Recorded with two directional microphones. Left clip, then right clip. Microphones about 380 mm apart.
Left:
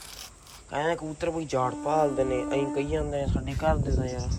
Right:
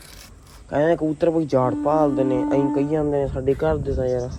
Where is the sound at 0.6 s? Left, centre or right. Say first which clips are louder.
Right 9 dB; centre.